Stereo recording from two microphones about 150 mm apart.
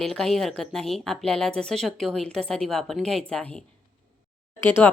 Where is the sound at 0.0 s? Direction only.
5° left (ahead or behind).